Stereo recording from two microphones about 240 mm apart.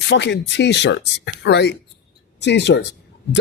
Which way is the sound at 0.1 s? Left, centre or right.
Left.